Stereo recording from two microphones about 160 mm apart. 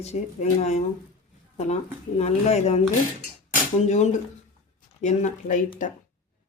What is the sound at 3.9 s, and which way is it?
Speech, 45° left (ahead or behind).